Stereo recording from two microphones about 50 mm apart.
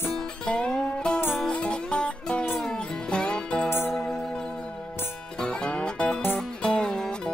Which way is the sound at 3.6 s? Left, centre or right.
Left.